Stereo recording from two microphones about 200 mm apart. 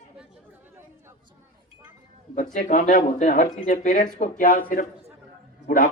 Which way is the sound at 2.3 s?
40° left (ahead or behind).